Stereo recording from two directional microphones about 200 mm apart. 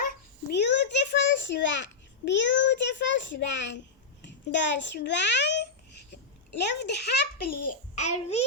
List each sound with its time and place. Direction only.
0.5 s a child's voice: 60° left (ahead or behind); by 8.4 s 35° left (ahead or behind)